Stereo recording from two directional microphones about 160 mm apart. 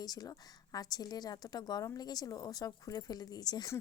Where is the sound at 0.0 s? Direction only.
25° left (ahead or behind).